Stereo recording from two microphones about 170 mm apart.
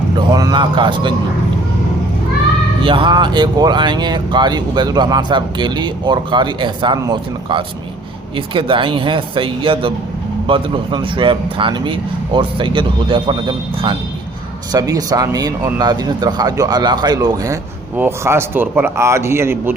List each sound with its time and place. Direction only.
0.3 s speech: 25° right (ahead or behind)
2.8 s a man's voice: 30° right (ahead or behind); by 19.7 s 15° right (ahead or behind)